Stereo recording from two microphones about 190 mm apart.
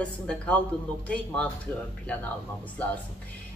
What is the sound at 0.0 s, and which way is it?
Speech, 5° left (ahead or behind).